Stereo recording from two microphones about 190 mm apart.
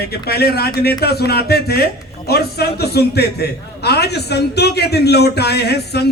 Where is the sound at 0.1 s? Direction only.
55° left (ahead or behind).